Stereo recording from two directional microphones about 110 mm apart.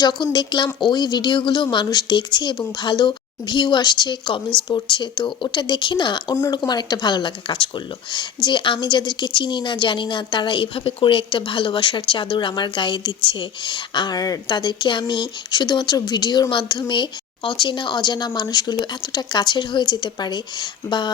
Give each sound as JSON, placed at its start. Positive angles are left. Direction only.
{"t": 0.0, "sound": "a woman's voice", "side_deg": 40}